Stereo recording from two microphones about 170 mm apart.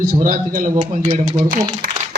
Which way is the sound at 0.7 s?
35° right (ahead or behind).